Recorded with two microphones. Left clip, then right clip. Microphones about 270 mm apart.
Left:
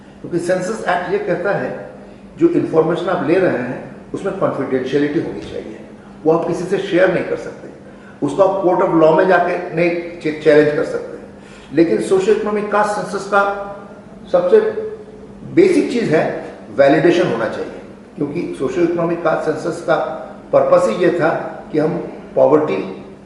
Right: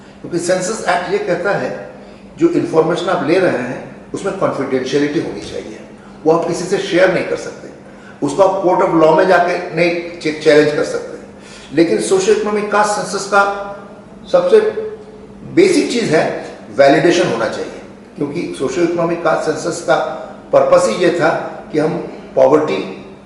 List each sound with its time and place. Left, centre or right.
0.4 s speech: centre
6.2 s speech: centre
16.0 s a man's voice: centre